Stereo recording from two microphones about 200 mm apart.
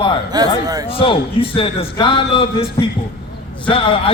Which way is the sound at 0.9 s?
25° left (ahead or behind).